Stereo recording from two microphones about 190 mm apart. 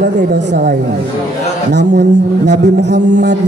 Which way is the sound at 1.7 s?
65° right (ahead or behind).